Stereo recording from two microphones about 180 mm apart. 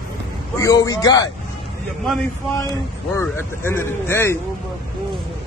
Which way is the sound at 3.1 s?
15° left (ahead or behind).